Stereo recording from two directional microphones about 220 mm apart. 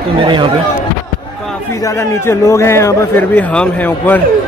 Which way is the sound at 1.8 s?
15° left (ahead or behind).